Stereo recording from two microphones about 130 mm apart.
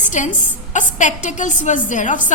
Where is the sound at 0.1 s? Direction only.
70° left (ahead or behind).